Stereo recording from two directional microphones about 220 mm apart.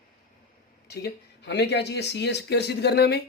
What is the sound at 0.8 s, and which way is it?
Speech, 45° left (ahead or behind).